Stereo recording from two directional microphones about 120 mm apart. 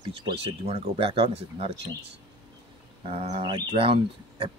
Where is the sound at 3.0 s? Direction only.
55° right (ahead or behind).